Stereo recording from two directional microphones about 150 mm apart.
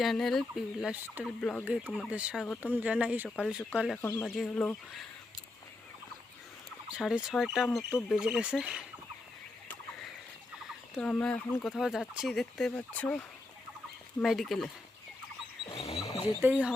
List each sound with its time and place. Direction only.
0.0 s speech: centre (ahead or behind)
1.4 s speech: 5° left (ahead or behind)
1.6 s speech: 10° right (ahead or behind)
4.4 s speech: 5° left (ahead or behind)
6.8 s speech: 5° right (ahead or behind)
10.7 s speech: centre (ahead or behind)
11.6 s speech: centre (ahead or behind)
15.6 s a sound: 40° left (ahead or behind)
16.4 s speech: 10° right (ahead or behind)